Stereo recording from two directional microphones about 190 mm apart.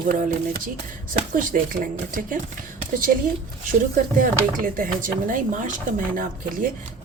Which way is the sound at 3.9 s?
45° right (ahead or behind).